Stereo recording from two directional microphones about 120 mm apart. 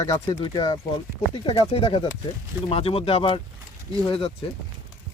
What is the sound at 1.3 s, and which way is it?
Speech, 45° left (ahead or behind).